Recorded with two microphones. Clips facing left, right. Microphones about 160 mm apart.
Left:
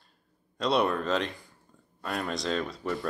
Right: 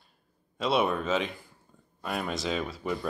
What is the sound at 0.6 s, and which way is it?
Speech, centre (ahead or behind).